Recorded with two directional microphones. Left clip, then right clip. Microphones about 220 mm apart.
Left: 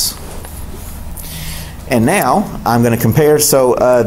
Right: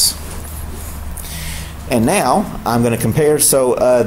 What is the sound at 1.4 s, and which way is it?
A man's voice, 15° left (ahead or behind).